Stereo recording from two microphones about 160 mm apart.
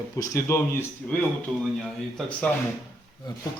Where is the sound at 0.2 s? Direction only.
15° left (ahead or behind).